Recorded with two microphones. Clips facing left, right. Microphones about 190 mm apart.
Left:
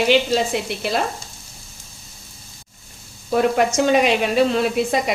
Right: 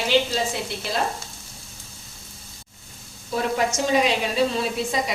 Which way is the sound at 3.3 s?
70° left (ahead or behind).